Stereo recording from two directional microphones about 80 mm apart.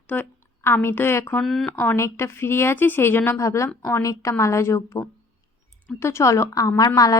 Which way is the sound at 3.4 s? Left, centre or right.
Left.